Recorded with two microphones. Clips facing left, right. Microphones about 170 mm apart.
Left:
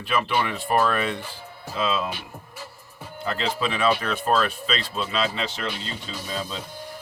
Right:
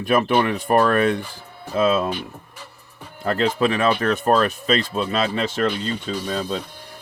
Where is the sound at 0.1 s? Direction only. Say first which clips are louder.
Right 6 dB; 45° right (ahead or behind).